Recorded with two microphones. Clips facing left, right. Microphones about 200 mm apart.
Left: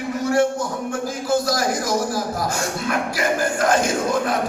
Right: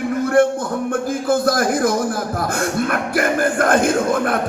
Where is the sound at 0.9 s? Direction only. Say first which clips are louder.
Right 3 dB; 55° right (ahead or behind).